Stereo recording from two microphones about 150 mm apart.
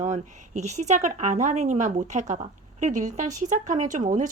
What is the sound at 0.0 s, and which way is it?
Speech, 50° right (ahead or behind).